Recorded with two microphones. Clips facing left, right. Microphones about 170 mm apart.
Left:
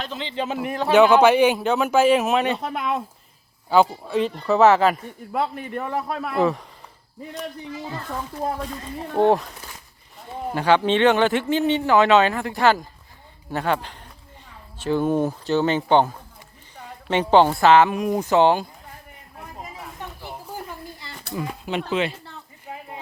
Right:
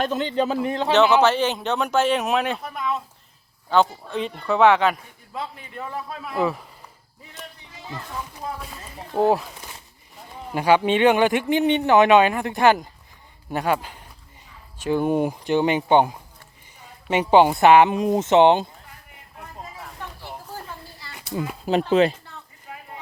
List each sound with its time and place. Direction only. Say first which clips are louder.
0.0 s a man's voice: right 6 dB; 50° right (ahead or behind); by 0.9 s 25° right (ahead or behind)
0.9 s speech: left 3 dB; 10° left (ahead or behind)
2.6 s speech: left 2 dB; 75° left (ahead or behind)
3.7 s speech: left 2 dB; 5° left (ahead or behind)
5.3 s a man's voice: left 8 dB; 60° left (ahead or behind)
6.4 s speech: left 2 dB; 5° right (ahead or behind)
9.1 s speech: left 1 dB; 5° right (ahead or behind)
10.5 s speech: even; 15° right (ahead or behind)
20.2 s a sound: left 3 dB; 15° left (ahead or behind)
21.7 s a man's voice: right 7 dB; 40° right (ahead or behind)
22.7 s a sound: left 4 dB; 25° left (ahead or behind)